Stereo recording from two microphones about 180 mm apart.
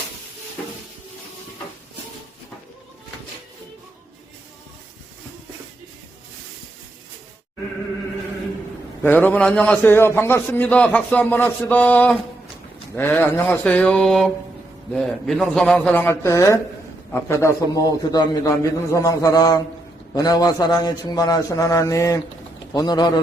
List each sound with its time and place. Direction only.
9.0 s a man's voice: 10° left (ahead or behind)